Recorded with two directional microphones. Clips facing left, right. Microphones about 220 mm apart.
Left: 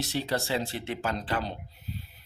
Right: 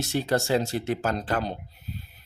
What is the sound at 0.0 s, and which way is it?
Speech, 50° right (ahead or behind).